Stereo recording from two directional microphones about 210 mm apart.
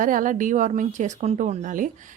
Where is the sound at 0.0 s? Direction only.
40° right (ahead or behind).